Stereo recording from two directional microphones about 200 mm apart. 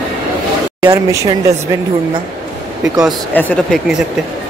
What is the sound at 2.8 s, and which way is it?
Speech, 15° right (ahead or behind).